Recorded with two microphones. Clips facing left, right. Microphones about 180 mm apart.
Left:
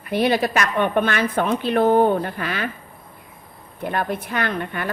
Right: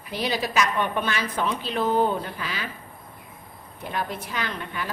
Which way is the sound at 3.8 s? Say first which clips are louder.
Left 6 dB; 55° left (ahead or behind).